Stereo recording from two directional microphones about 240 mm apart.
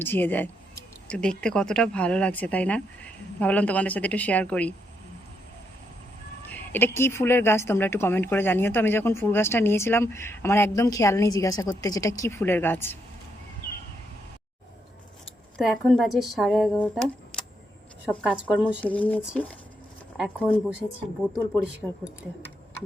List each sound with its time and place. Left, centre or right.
0.0 s speech: centre
6.5 s speech: centre
15.5 s speech: centre